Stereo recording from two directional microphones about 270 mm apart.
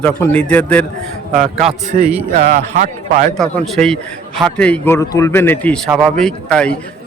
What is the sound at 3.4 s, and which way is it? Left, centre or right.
A man's voice, centre.